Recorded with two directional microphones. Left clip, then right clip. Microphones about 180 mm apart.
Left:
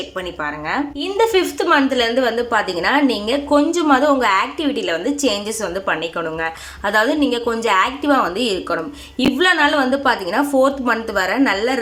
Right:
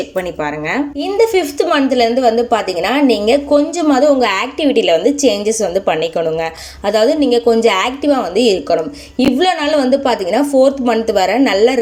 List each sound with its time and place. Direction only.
1.1 s a woman's voice: 5° right (ahead or behind)